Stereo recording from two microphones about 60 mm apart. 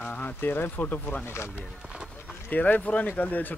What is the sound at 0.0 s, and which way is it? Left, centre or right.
Speech, left.